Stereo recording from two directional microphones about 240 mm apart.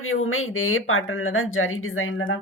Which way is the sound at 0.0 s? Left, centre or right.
Left.